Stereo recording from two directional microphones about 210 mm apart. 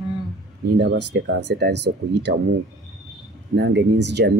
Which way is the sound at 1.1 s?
55° right (ahead or behind).